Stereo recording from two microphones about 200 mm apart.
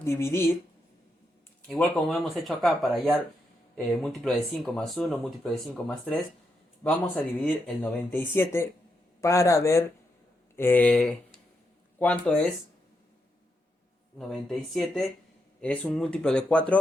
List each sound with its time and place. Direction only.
0.0 s speech: 15° left (ahead or behind)
1.6 s speech: 5° left (ahead or behind)
14.2 s speech: centre (ahead or behind)